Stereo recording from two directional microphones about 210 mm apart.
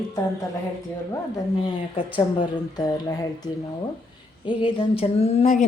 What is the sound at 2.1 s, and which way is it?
Speech, 20° left (ahead or behind).